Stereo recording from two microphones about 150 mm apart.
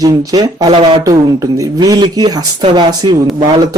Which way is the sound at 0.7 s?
40° right (ahead or behind).